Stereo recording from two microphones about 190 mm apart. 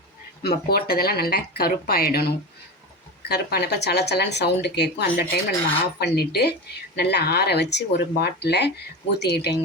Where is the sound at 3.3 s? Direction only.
60° left (ahead or behind).